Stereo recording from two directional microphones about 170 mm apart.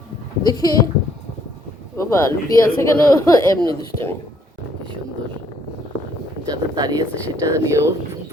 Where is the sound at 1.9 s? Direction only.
15° left (ahead or behind).